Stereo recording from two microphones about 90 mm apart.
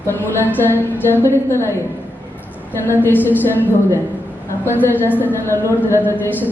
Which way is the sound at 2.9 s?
20° left (ahead or behind).